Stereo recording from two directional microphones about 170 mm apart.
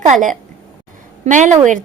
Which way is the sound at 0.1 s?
50° right (ahead or behind).